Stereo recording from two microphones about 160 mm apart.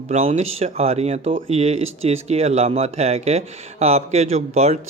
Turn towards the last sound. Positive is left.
turn(degrees=-40)  # may be behind; listen again after turning